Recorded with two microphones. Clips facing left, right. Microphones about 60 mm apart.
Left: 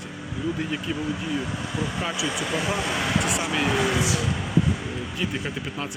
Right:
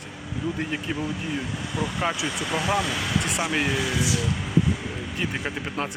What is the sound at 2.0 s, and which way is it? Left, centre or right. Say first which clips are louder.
Speech: right 1 dB; right.